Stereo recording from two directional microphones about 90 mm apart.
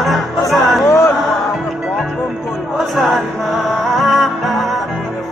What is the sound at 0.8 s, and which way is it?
Speech, 35° left (ahead or behind).